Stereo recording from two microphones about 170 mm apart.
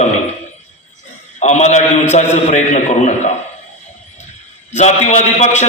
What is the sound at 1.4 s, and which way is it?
A man's voice, 40° left (ahead or behind).